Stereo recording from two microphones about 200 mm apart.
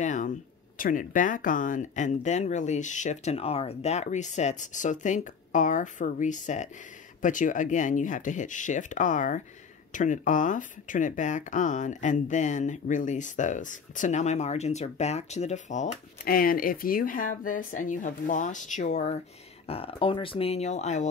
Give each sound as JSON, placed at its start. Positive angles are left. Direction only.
{"t": 0.0, "sound": "speech", "side_deg": 35}